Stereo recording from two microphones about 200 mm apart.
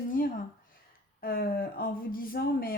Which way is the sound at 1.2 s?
45° left (ahead or behind).